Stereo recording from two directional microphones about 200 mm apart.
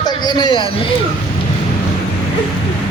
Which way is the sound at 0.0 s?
20° left (ahead or behind).